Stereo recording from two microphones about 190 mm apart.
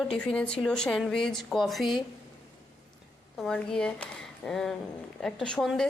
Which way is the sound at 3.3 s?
5° left (ahead or behind).